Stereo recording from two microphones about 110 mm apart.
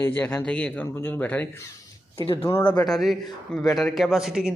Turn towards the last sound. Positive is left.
turn(degrees=-5)  # may be behind; listen again after turning